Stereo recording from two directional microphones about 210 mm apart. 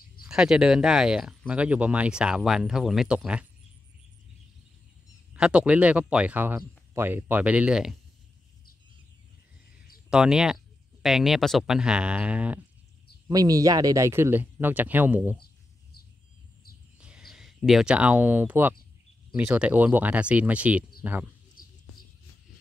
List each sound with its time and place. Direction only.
0.2 s speech: 5° right (ahead or behind)
5.3 s speech: 5° right (ahead or behind)
10.0 s speech: 5° right (ahead or behind)
13.3 s speech: 15° right (ahead or behind)
17.0 s speech: 5° right (ahead or behind)
21.6 s a sound: 40° left (ahead or behind)